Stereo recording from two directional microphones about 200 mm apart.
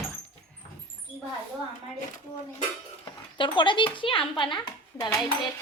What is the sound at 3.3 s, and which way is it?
A child's voice, 25° left (ahead or behind).